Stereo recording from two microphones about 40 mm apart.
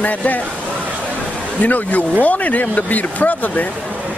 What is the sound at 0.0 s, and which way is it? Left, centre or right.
Speech, left.